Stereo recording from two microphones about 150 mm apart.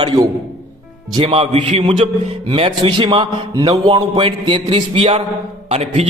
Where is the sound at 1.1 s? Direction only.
40° right (ahead or behind).